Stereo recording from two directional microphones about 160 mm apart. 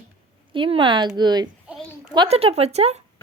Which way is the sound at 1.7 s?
5° right (ahead or behind).